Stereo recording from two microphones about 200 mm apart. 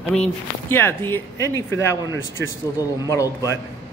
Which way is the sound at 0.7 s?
10° left (ahead or behind).